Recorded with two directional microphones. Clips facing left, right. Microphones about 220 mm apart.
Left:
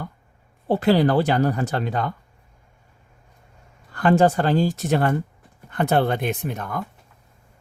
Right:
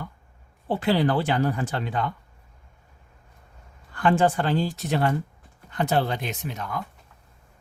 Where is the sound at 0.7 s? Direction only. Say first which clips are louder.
Left 5 dB; 40° left (ahead or behind).